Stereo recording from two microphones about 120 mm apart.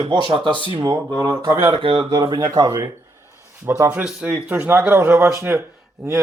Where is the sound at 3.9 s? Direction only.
5° right (ahead or behind).